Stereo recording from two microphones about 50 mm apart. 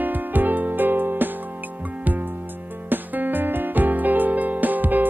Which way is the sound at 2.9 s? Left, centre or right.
Right.